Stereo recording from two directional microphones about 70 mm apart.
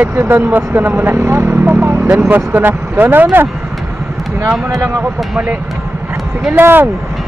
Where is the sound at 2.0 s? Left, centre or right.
Centre.